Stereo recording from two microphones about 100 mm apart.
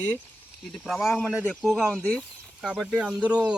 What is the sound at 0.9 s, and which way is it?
Speech, centre (ahead or behind).